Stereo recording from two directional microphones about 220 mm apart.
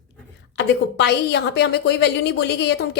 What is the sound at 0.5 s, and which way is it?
A woman's voice, 50° left (ahead or behind).